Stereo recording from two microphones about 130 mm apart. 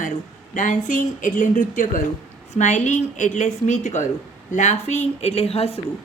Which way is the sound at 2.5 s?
65° left (ahead or behind).